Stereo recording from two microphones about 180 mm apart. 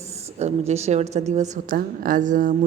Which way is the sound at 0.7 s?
35° right (ahead or behind).